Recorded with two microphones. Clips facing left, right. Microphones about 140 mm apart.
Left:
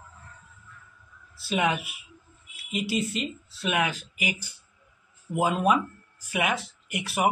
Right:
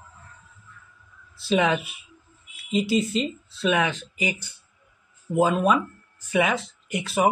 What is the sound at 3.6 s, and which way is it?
Speech, 10° left (ahead or behind).